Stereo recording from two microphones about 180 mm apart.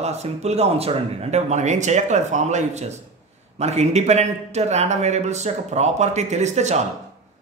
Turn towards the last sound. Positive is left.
turn(degrees=-40)  # may be behind; listen again after turning